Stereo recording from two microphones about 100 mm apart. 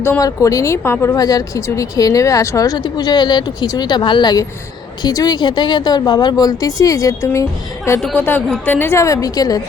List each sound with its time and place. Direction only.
0.2 s speech: 35° left (ahead or behind)
1.1 s speech: 40° left (ahead or behind)
8.0 s speech: 15° left (ahead or behind); by 9.6 s 40° left (ahead or behind)